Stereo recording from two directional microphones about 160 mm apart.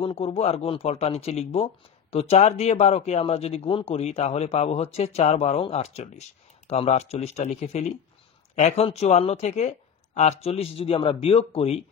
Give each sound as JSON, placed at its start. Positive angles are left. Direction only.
{"t": 0.0, "sound": "speech", "side_deg": 40}